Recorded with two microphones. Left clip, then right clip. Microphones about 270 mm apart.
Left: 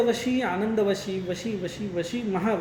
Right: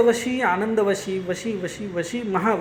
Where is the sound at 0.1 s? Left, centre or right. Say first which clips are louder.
Right 5 dB; right.